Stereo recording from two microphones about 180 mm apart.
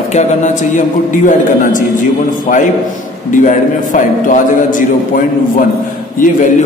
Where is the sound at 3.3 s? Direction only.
45° left (ahead or behind).